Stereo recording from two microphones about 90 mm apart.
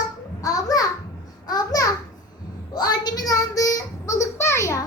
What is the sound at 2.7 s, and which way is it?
Child singing, 50° left (ahead or behind).